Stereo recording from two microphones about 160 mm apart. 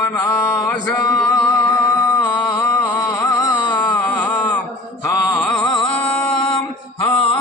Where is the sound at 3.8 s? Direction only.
10° left (ahead or behind).